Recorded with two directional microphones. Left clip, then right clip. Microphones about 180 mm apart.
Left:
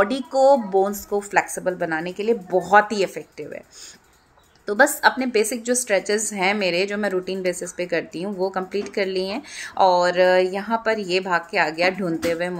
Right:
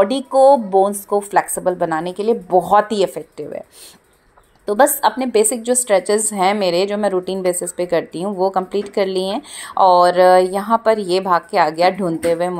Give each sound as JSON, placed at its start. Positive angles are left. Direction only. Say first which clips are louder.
{"t": 0.4, "sound": "speech", "louder": "right 5 dB", "side_deg": -15}
{"t": 4.6, "sound": "speech", "louder": "right 3 dB", "side_deg": -25}